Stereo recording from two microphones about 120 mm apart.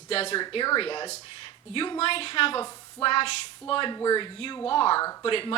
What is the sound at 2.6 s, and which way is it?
Speech, 30° left (ahead or behind).